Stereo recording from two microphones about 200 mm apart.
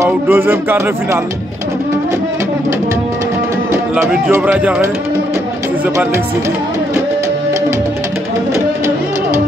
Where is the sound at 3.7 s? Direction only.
10° right (ahead or behind).